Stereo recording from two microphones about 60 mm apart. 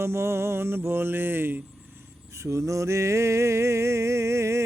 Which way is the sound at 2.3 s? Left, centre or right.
Right.